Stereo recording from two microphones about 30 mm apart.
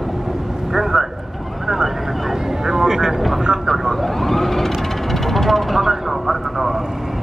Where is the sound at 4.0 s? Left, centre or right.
Centre.